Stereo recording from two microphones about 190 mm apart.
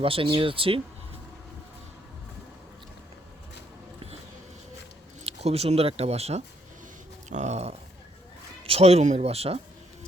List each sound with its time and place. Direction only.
0.0 s speech: 30° right (ahead or behind)
5.2 s speech: 35° right (ahead or behind)